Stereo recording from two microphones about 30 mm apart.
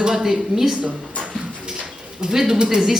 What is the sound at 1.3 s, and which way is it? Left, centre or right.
Bird, right.